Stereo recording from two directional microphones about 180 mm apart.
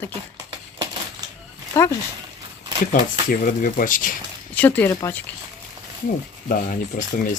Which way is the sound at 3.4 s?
50° left (ahead or behind).